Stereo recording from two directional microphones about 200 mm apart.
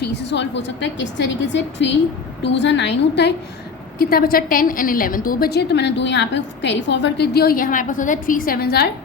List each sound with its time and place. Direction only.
0.0 s a woman's voice: 60° left (ahead or behind)
3.9 s a woman's voice: 50° left (ahead or behind)